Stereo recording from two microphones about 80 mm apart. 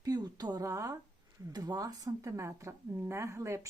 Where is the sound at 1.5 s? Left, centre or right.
Right.